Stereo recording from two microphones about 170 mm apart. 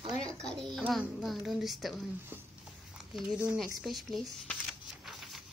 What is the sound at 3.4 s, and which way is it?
Speech, centre (ahead or behind).